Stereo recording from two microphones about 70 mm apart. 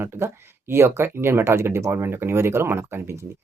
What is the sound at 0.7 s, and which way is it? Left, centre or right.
Speech, right.